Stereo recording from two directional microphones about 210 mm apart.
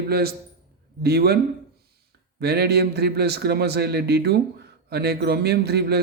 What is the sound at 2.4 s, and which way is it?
A man's voice, 50° right (ahead or behind).